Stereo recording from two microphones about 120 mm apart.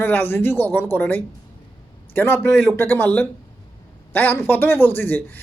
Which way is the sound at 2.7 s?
15° left (ahead or behind).